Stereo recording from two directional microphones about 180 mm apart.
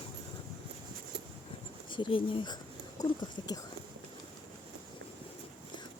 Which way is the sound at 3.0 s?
20° left (ahead or behind).